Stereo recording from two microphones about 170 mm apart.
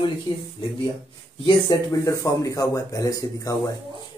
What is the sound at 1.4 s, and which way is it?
Speech, 20° left (ahead or behind).